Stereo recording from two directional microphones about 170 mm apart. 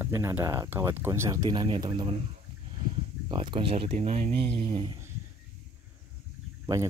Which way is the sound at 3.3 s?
30° right (ahead or behind).